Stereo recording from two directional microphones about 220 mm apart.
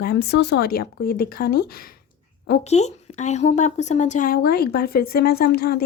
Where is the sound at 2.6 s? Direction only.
30° left (ahead or behind).